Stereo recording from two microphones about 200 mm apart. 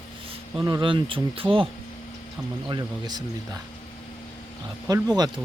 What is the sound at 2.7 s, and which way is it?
Speech, 20° right (ahead or behind).